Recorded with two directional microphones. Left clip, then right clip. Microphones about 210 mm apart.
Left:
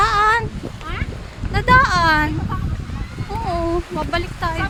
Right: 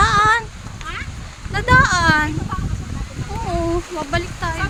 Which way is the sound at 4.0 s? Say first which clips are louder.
Left 1 dB; 15° left (ahead or behind).